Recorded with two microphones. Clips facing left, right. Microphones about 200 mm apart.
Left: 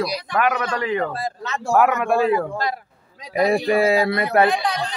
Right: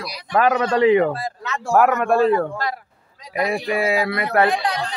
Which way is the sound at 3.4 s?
35° left (ahead or behind).